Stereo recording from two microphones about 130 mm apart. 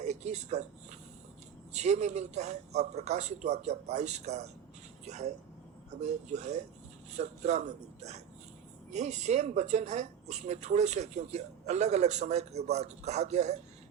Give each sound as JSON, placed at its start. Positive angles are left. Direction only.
{"t": 0.0, "sound": "a sound", "side_deg": -60}
{"t": 1.7, "sound": "speech", "side_deg": -60}
{"t": 8.9, "sound": "speech", "side_deg": -60}